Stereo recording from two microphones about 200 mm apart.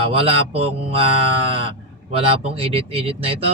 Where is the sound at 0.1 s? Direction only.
30° right (ahead or behind).